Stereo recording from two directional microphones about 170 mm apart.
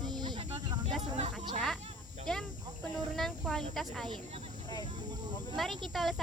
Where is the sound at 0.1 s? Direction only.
25° right (ahead or behind).